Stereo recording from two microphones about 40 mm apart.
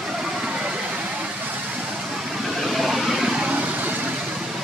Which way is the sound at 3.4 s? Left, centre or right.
Right.